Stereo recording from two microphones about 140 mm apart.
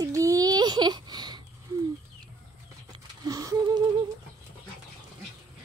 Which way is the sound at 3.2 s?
25° right (ahead or behind).